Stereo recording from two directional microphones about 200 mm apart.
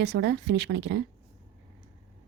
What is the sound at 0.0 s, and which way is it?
Speech, 55° right (ahead or behind).